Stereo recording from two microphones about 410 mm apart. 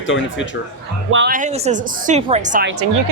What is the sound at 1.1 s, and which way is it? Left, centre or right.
A woman's voice, right.